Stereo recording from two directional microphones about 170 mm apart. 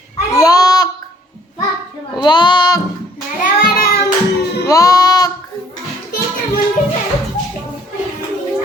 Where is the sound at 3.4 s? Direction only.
60° left (ahead or behind).